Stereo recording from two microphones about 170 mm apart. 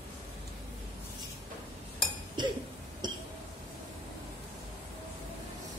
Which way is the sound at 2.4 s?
25° right (ahead or behind).